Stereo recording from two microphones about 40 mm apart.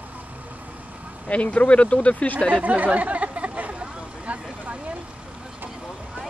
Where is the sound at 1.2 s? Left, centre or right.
Left.